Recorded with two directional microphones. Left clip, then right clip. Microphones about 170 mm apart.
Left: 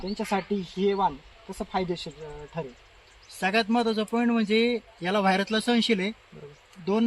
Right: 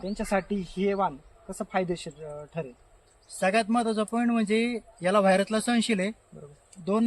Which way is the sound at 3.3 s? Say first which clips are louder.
Even; 45° right (ahead or behind).